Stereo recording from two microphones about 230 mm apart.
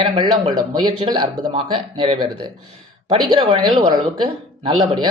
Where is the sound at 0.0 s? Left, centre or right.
Right.